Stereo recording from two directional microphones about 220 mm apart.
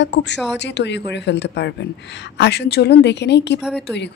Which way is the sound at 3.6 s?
5° right (ahead or behind).